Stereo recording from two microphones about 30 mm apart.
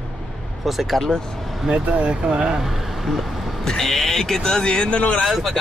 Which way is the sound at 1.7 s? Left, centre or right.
Centre.